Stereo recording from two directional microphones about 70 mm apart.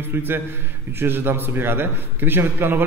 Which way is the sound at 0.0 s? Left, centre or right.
Right.